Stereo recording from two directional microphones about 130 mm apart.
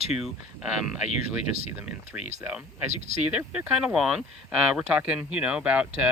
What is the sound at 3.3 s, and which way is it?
Speech, 10° right (ahead or behind).